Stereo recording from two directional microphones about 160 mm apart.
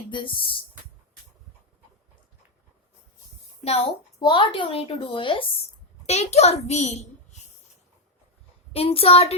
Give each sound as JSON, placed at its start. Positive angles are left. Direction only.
{"t": 0.1, "sound": "a woman's voice", "side_deg": 30}
{"t": 3.6, "sound": "a woman's voice", "side_deg": 40}
{"t": 8.7, "sound": "a woman's voice", "side_deg": 35}